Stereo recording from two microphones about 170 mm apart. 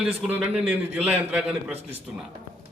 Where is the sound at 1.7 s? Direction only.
35° right (ahead or behind).